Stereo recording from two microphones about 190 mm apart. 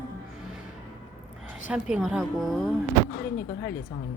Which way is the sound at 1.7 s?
5° right (ahead or behind).